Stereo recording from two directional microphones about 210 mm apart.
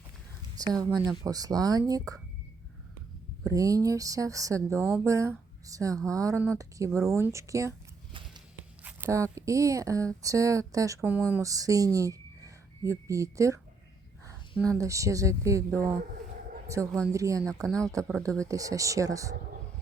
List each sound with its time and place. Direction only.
0.5 s speech: 20° right (ahead or behind)
3.4 s speech: 15° right (ahead or behind)
8.8 s speech: 10° right (ahead or behind)
14.6 s speech: 15° right (ahead or behind)
17.1 s speech: 15° right (ahead or behind)
17.7 s speech: centre (ahead or behind)
17.9 s speech: 15° right (ahead or behind)